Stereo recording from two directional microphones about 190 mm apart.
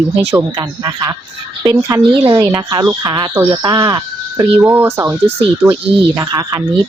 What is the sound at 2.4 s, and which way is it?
Speech, 15° right (ahead or behind).